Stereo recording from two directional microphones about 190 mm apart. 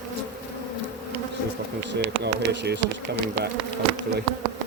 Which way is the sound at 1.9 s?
70° right (ahead or behind).